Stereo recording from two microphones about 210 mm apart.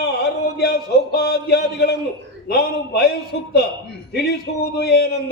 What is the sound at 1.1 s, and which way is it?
A man's voice, 50° left (ahead or behind).